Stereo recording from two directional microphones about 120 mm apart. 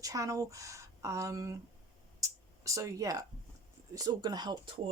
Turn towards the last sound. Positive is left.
turn(degrees=-45)  # may be behind; listen again after turning